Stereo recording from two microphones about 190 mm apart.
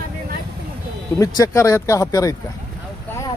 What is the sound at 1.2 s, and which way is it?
Speech, 15° left (ahead or behind).